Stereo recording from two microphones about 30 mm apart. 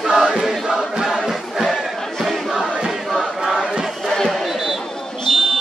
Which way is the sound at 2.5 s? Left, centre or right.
Centre.